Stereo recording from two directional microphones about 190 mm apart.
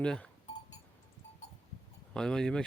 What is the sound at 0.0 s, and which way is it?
Speech, 5° left (ahead or behind).